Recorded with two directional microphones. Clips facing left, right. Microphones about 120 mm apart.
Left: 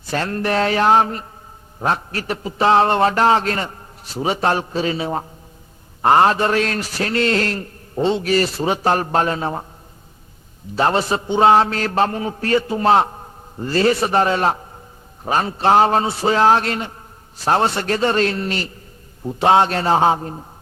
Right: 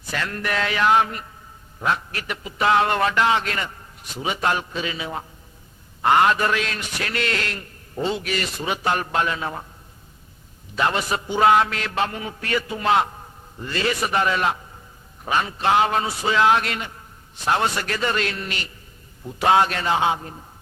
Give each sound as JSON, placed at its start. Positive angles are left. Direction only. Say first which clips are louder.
{"t": 0.1, "sound": "a man's voice", "louder": "left 6 dB", "side_deg": 35}
{"t": 10.8, "sound": "a man's voice", "louder": "left 5 dB", "side_deg": 35}